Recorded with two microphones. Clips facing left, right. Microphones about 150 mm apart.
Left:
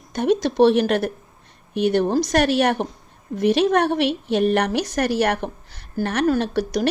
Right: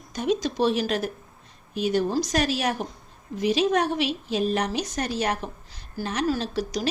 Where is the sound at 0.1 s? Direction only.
60° left (ahead or behind).